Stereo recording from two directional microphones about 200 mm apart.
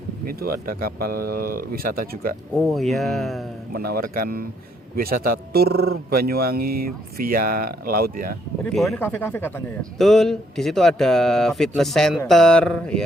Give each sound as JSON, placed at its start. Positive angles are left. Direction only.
{"t": 0.3, "sound": "speech", "side_deg": -50}
{"t": 2.6, "sound": "speech", "side_deg": 0}
{"t": 3.8, "sound": "speech", "side_deg": -50}
{"t": 8.7, "sound": "speech", "side_deg": 0}